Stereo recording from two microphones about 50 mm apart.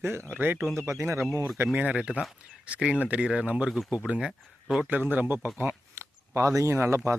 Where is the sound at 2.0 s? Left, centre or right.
Centre.